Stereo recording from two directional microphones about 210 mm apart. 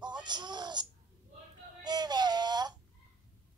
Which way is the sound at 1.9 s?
20° right (ahead or behind).